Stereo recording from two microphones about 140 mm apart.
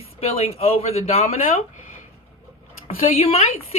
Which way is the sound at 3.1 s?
45° left (ahead or behind).